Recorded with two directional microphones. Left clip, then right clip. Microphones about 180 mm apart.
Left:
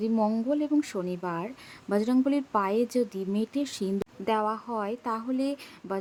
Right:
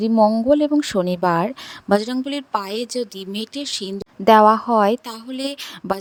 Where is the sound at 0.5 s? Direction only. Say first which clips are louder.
Right 11 dB; 45° right (ahead or behind).